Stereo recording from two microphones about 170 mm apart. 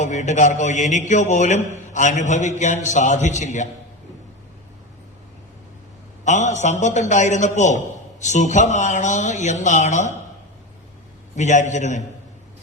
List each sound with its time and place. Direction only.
0.0 s a man's voice: 45° left (ahead or behind)
6.2 s a man's voice: 45° left (ahead or behind)
11.3 s a man's voice: 45° left (ahead or behind)